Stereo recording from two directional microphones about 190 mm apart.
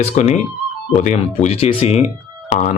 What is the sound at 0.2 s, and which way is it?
Speech, 40° left (ahead or behind).